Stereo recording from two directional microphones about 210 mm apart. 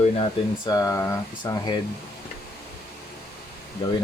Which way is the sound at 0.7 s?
15° left (ahead or behind).